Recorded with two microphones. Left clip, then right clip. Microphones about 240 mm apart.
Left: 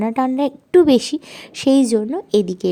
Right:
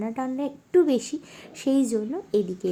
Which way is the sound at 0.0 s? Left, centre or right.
Left.